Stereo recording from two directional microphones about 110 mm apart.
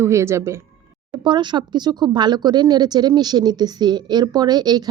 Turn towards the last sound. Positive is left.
turn(degrees=-40)  # may be behind; listen again after turning